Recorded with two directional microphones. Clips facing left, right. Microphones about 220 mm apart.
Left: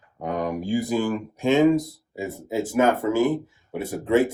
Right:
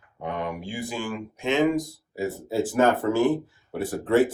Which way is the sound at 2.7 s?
10° left (ahead or behind).